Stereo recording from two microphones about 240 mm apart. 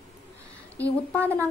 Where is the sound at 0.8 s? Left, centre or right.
Centre.